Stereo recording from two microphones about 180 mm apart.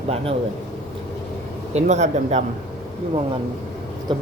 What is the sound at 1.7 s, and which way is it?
Speech, 40° right (ahead or behind).